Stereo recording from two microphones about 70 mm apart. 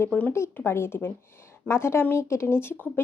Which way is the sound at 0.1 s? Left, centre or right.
Left.